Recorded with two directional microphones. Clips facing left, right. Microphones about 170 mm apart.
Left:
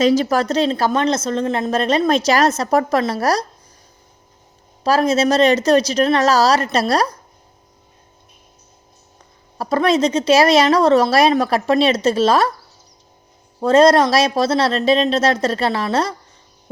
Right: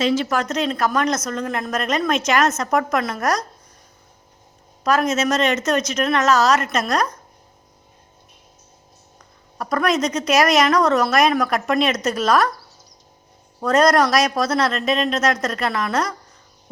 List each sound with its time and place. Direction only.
0.0 s speech: 40° left (ahead or behind)
4.8 s speech: 30° left (ahead or behind)
9.6 s a woman's voice: 30° left (ahead or behind)
13.6 s a woman's voice: 30° left (ahead or behind)